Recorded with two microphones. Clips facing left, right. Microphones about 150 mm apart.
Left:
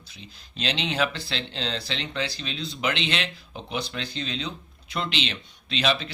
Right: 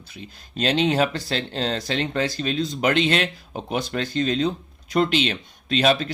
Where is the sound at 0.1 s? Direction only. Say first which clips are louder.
Right 8 dB; 50° right (ahead or behind).